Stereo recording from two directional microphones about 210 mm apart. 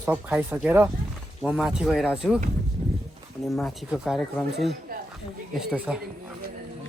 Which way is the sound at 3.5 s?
Centre (ahead or behind).